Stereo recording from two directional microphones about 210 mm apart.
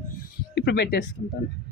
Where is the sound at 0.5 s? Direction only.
55° left (ahead or behind).